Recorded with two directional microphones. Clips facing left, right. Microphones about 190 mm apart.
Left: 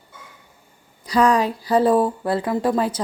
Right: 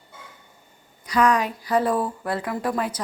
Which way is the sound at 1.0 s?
30° left (ahead or behind).